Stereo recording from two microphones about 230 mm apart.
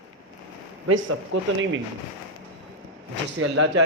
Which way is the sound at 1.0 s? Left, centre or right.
Right.